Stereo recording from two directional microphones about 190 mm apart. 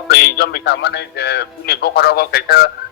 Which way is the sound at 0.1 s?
60° left (ahead or behind).